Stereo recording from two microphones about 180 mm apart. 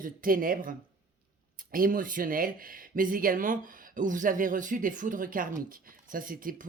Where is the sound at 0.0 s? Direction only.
50° right (ahead or behind).